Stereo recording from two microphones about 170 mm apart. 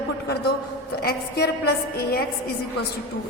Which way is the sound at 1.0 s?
65° left (ahead or behind).